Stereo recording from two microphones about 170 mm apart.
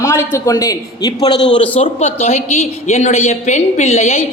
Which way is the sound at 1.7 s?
35° left (ahead or behind).